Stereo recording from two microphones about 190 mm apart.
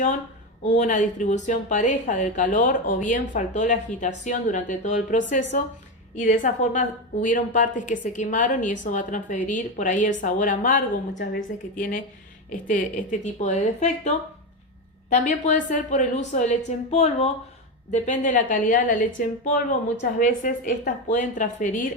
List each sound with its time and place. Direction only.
0.8 s a woman's voice: 40° left (ahead or behind)
15.1 s a woman's voice: 40° left (ahead or behind)